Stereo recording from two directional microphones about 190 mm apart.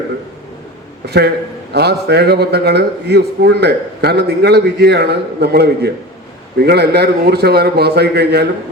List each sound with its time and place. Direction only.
1.0 s a man's voice: 60° right (ahead or behind)